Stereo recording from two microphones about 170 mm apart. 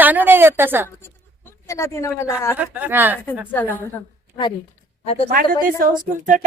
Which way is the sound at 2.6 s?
10° right (ahead or behind).